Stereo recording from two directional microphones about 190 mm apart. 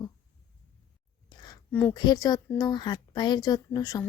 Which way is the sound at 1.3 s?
20° left (ahead or behind).